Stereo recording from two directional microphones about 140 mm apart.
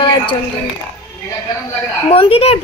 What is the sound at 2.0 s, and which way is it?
Speech, 40° left (ahead or behind).